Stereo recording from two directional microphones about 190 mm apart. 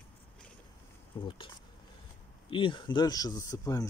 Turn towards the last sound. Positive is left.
turn(degrees=20)  # may be behind; listen again after turning